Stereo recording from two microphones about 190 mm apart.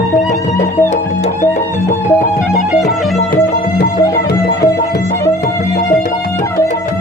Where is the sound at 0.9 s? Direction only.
40° left (ahead or behind).